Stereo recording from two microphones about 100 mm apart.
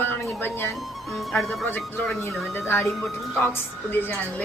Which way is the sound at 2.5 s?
25° left (ahead or behind).